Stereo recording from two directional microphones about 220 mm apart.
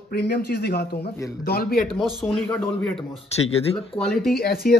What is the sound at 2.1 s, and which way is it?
Speech, 5° left (ahead or behind).